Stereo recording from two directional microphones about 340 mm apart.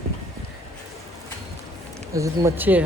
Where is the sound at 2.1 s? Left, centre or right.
Centre.